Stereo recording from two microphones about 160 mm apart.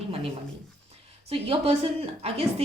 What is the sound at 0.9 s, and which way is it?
A woman's voice, 40° right (ahead or behind).